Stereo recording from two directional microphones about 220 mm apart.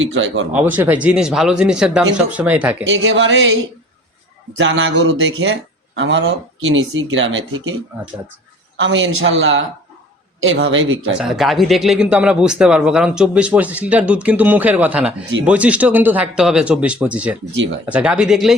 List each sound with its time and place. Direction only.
0.0 s speech: 60° right (ahead or behind)
0.5 s speech: 10° right (ahead or behind)
2.8 s speech: 60° right (ahead or behind)
4.5 s speech: 55° right (ahead or behind)
8.8 s speech: 55° right (ahead or behind)
11.2 s speech: centre (ahead or behind)